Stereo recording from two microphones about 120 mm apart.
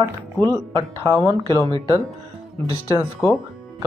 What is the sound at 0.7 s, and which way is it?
Speech, 40° right (ahead or behind).